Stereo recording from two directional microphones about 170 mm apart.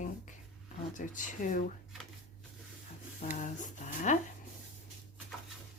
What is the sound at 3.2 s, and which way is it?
Speech, 50° left (ahead or behind).